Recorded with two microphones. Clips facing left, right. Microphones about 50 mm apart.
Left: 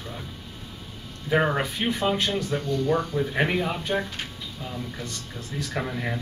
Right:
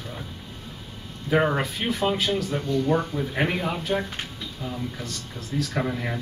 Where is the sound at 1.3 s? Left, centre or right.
Centre.